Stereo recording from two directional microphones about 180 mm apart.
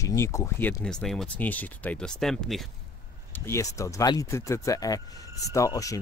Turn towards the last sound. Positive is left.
turn(degrees=20)  # may be behind; listen again after turning